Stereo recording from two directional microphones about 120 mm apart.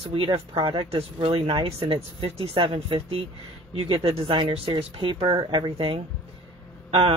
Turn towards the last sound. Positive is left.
turn(degrees=-50)  # may be behind; listen again after turning